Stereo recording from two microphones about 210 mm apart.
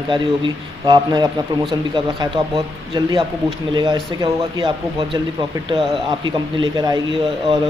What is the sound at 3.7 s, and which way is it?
A man's voice, 20° right (ahead or behind).